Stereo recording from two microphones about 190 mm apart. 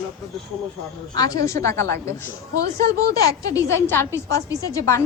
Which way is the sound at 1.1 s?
20° left (ahead or behind).